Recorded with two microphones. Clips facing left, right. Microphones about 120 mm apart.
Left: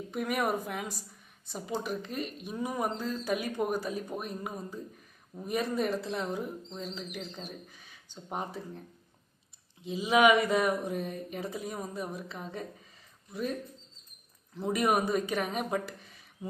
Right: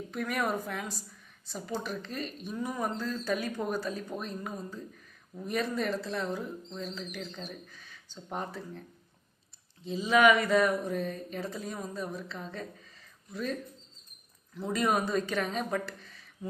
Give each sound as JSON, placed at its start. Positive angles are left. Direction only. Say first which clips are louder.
{"t": 0.1, "sound": "speech", "louder": "left 1 dB", "side_deg": 15}
{"t": 9.8, "sound": "speech", "louder": "even", "side_deg": 15}